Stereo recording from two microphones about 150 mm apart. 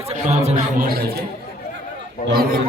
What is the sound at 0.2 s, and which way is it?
Speech, 50° right (ahead or behind).